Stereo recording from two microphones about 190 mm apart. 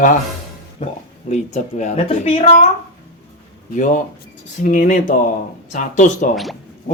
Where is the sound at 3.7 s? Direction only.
40° left (ahead or behind).